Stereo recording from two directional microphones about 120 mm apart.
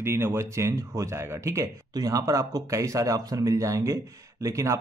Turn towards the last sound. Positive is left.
turn(degrees=-25)  # may be behind; listen again after turning